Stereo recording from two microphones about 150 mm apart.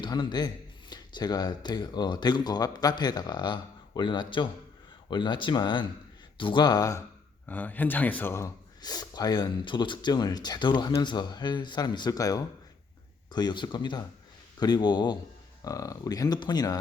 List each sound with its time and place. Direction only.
0.0 s speech: 30° left (ahead or behind)
7.4 s speech: 10° left (ahead or behind)
8.8 s speech: 25° left (ahead or behind)